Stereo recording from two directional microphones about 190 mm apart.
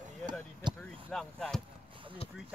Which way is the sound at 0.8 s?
5° left (ahead or behind).